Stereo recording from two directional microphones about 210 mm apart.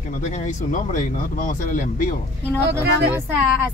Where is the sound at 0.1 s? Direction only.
35° left (ahead or behind).